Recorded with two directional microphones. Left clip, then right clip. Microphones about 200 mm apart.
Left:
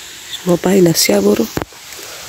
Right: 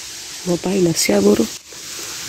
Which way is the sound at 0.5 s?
25° left (ahead or behind).